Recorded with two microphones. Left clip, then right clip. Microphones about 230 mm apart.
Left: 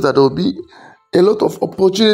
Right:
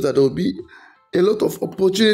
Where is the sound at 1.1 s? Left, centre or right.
Centre.